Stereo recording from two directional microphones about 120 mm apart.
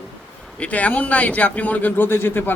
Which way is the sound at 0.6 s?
10° left (ahead or behind).